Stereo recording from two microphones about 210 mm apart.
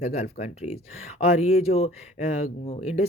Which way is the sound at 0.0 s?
30° left (ahead or behind).